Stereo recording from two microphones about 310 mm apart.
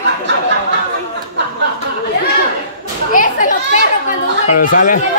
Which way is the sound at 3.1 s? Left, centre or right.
Left.